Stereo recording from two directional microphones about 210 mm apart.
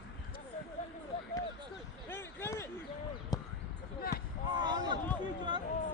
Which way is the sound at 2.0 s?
10° left (ahead or behind).